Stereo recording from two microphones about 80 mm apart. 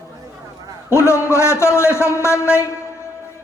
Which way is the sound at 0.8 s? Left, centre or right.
Left.